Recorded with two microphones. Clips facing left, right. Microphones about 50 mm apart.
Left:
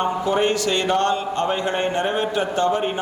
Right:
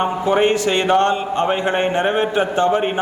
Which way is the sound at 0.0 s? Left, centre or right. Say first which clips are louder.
Right 4 dB; right.